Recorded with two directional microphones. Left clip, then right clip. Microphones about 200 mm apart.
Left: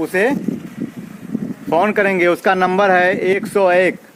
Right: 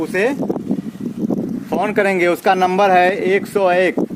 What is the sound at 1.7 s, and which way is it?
Speech, 40° left (ahead or behind).